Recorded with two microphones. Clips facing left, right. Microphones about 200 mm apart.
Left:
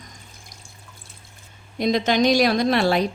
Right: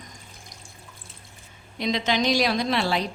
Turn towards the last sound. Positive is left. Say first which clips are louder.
# left 5 dB
turn(degrees=50)  # may be behind; listen again after turning